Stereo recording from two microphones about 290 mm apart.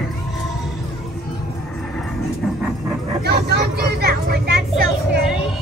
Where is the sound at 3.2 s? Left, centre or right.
Right.